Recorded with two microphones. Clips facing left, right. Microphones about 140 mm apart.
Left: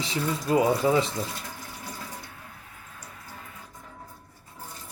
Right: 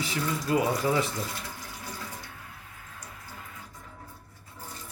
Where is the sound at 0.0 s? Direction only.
25° left (ahead or behind).